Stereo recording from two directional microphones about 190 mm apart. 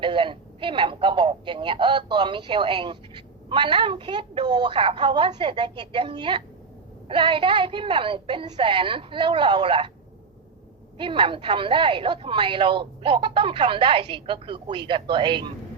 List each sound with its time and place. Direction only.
0.0 s speech: 25° right (ahead or behind)
10.9 s speech: 25° right (ahead or behind)